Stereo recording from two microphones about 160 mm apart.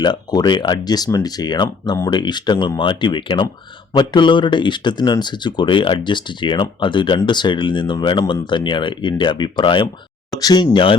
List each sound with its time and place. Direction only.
0.0 s speech: 25° left (ahead or behind)